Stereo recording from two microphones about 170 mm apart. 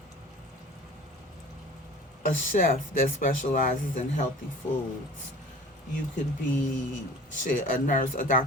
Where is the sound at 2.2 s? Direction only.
50° left (ahead or behind).